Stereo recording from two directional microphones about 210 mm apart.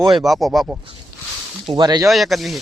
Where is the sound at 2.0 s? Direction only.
Centre (ahead or behind).